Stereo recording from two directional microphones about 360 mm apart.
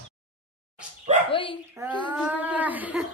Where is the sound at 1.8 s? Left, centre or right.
Centre.